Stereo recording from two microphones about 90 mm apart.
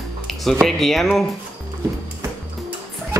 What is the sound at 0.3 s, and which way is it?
Speech, centre (ahead or behind).